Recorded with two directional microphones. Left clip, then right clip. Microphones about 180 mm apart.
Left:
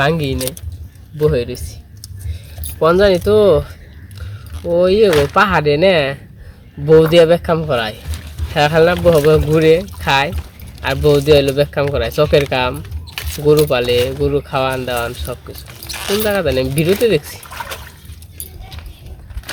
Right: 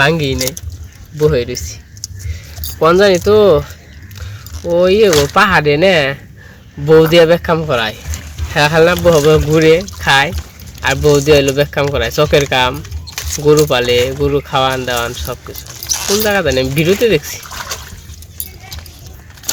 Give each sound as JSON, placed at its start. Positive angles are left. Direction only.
{"t": 0.0, "sound": "speech", "side_deg": -20}
{"t": 15.8, "sound": "zipper", "side_deg": 15}
{"t": 16.2, "sound": "speech", "side_deg": -15}